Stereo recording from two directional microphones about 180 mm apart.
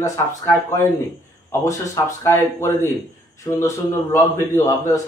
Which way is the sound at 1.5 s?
15° left (ahead or behind).